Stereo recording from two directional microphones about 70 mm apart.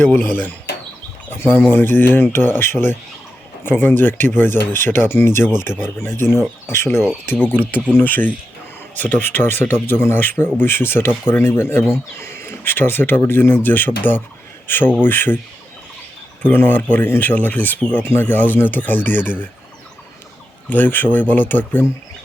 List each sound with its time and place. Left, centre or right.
0.0 s speech: left
7.5 s speech: left
16.4 s speech: left
20.7 s speech: left